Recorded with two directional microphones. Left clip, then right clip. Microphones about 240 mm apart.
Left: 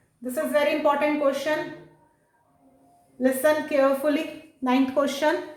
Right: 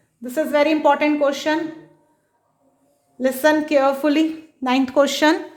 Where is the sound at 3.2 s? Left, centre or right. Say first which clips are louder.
Right 4 dB; right.